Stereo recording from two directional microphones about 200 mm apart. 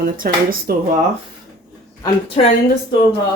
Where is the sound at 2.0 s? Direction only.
30° left (ahead or behind).